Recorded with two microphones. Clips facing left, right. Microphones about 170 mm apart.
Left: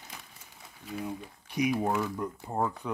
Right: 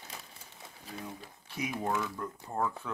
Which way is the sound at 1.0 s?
15° left (ahead or behind).